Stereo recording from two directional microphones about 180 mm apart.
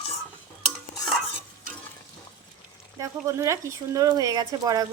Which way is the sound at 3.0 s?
15° right (ahead or behind).